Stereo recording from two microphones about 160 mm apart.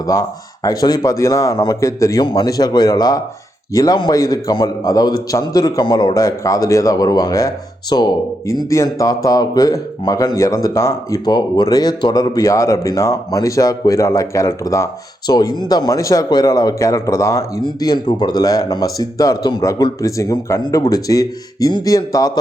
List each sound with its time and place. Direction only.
0.0 s a man's voice: 20° left (ahead or behind)